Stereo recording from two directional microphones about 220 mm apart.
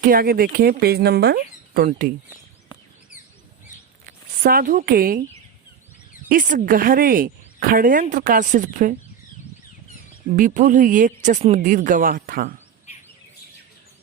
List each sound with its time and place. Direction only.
0.0 s speech: 40° right (ahead or behind)
4.4 s speech: 40° right (ahead or behind)
6.2 s speech: 40° right (ahead or behind)
10.3 s speech: 40° right (ahead or behind)